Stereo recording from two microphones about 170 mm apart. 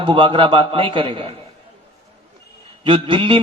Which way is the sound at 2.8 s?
30° right (ahead or behind).